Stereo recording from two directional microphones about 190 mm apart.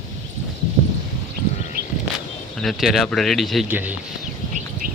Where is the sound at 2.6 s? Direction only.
Centre (ahead or behind).